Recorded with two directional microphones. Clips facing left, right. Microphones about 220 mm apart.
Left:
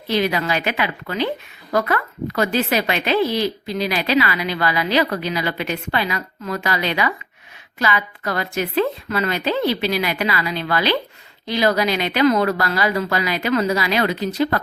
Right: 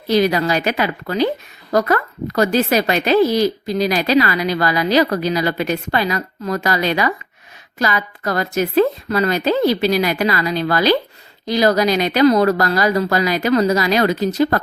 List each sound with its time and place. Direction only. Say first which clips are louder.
0.1 s a woman's voice: right 5 dB; 40° right (ahead or behind)